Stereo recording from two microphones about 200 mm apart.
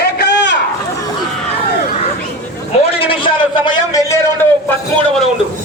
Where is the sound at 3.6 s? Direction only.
20° left (ahead or behind).